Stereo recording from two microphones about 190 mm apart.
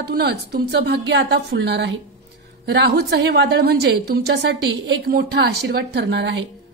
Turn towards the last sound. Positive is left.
turn(degrees=-70)  # may be behind; listen again after turning